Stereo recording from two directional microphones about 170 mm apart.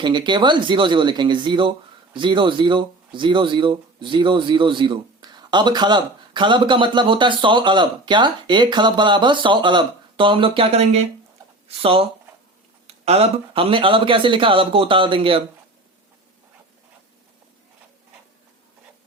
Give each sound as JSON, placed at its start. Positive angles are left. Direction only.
{"t": 0.0, "sound": "speech", "side_deg": -25}
{"t": 13.1, "sound": "speech", "side_deg": -35}